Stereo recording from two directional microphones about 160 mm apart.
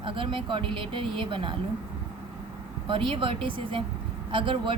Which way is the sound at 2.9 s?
35° right (ahead or behind).